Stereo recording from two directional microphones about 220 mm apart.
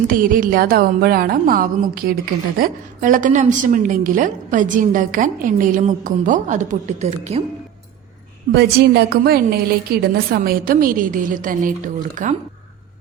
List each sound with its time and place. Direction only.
0.1 s a woman's voice: 40° right (ahead or behind)
8.5 s a woman's voice: 45° right (ahead or behind)